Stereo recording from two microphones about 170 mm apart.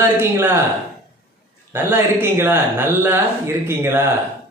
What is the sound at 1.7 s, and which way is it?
Speech, 15° right (ahead or behind).